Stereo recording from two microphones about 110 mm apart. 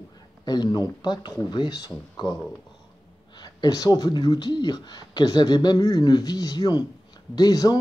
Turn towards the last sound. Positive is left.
turn(degrees=35)  # may be behind; listen again after turning